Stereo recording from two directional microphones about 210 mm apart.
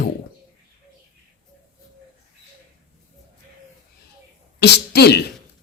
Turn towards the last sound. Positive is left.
turn(degrees=50)  # may be behind; listen again after turning